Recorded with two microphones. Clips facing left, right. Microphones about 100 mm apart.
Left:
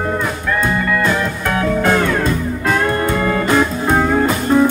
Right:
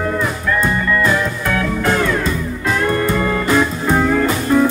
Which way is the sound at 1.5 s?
30° left (ahead or behind).